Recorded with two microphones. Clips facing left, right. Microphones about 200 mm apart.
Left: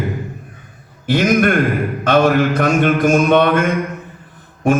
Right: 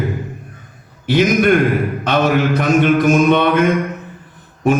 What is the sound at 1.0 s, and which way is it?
Mantra, 50° left (ahead or behind).